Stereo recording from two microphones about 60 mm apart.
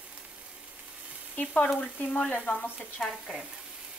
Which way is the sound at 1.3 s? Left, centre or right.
Left.